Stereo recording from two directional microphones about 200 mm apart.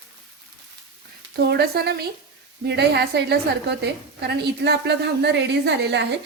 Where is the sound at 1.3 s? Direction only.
55° right (ahead or behind).